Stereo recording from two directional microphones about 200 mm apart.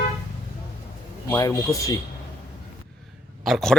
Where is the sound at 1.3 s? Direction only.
15° left (ahead or behind).